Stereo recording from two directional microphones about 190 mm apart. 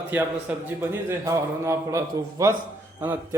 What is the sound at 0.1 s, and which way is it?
A man's voice, 10° right (ahead or behind).